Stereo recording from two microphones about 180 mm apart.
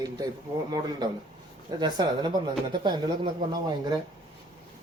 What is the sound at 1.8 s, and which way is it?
Speech, 25° right (ahead or behind).